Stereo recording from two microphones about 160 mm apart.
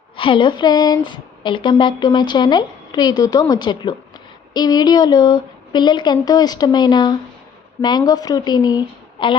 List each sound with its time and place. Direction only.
0.2 s speech: 30° left (ahead or behind)